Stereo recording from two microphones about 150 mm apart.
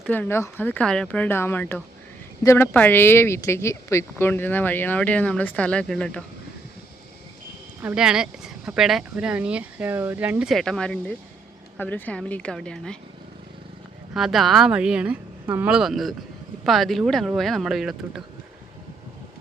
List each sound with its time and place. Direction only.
0.1 s speech: 15° left (ahead or behind)
7.8 s speech: 10° right (ahead or behind)
14.1 s speech: centre (ahead or behind)